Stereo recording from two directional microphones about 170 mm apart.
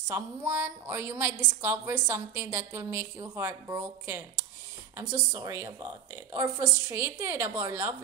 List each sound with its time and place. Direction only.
0.1 s a woman's voice: 10° right (ahead or behind)